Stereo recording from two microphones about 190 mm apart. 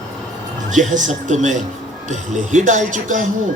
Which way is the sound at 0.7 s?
40° right (ahead or behind).